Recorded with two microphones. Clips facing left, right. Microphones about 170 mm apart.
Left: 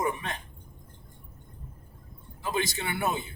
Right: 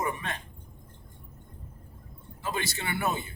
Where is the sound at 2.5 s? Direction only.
20° left (ahead or behind).